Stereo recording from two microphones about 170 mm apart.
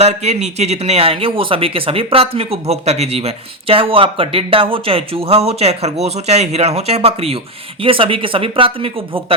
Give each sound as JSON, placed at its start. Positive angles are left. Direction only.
{"t": 0.0, "sound": "speech", "side_deg": -40}